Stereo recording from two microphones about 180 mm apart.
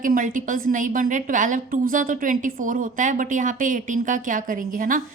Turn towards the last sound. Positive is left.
turn(degrees=-50)  # may be behind; listen again after turning